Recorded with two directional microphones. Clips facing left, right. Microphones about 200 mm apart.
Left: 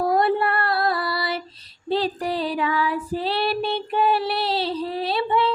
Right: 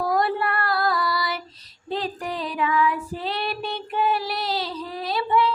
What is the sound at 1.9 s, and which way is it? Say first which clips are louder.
Female singing: left 5 dB; 35° left (ahead or behind).